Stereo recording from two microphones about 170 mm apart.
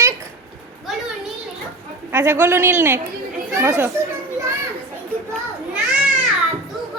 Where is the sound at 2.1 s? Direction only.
15° right (ahead or behind).